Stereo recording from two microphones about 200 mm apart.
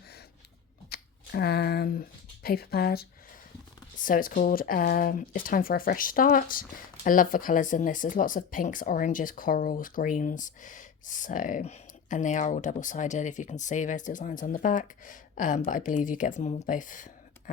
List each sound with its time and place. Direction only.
0.9 s speech: 50° left (ahead or behind)